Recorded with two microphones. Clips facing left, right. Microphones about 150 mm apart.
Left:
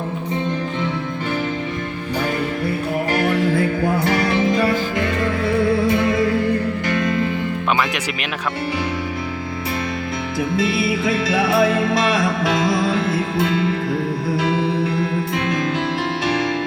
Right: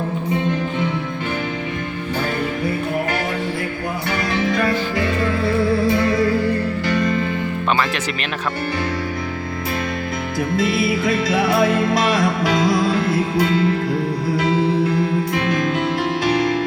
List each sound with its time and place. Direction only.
4.2 s music: 25° left (ahead or behind)
4.9 s music: 5° right (ahead or behind)
10.6 s music: centre (ahead or behind)